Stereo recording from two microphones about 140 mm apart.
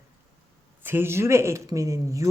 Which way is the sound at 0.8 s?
15° right (ahead or behind).